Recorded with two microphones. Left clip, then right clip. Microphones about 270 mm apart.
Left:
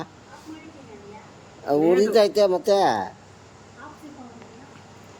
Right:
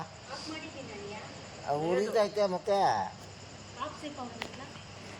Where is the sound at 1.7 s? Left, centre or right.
Left.